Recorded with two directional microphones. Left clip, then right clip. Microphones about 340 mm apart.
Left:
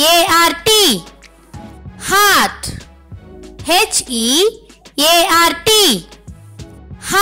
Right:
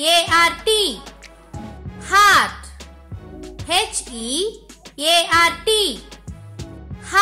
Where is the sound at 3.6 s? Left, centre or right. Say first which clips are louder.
Left 7 dB; left.